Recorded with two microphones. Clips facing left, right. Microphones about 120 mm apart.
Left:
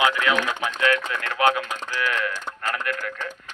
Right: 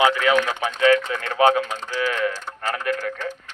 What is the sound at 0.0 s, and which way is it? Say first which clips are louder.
Speech: right 4 dB; 30° right (ahead or behind).